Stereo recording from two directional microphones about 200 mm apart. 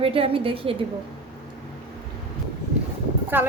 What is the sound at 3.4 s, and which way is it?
Speech, 10° right (ahead or behind).